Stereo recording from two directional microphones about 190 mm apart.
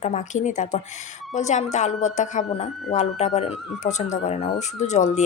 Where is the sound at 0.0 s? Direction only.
35° left (ahead or behind).